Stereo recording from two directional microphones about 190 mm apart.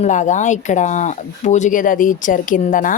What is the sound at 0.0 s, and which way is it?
A woman's voice, 40° left (ahead or behind).